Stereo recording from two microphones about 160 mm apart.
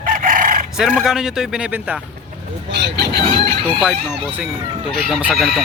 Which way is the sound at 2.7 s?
90° right.